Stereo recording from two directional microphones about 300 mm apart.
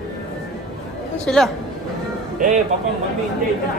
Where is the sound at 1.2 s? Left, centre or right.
Centre.